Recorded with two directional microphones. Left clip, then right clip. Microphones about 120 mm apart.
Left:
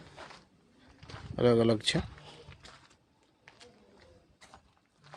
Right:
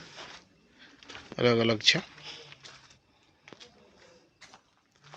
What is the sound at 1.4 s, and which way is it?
Speech, 35° left (ahead or behind).